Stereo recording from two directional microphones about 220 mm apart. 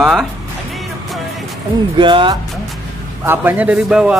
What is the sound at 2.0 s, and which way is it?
Speech, 20° right (ahead or behind).